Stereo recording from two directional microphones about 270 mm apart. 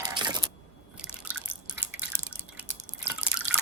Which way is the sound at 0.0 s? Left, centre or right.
Centre.